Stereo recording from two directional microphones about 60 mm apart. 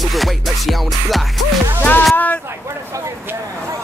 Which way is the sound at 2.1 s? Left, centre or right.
Left.